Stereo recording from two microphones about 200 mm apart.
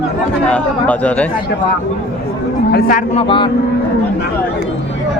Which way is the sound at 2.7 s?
45° left (ahead or behind).